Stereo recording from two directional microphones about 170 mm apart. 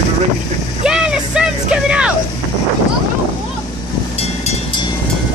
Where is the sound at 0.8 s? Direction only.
5° right (ahead or behind).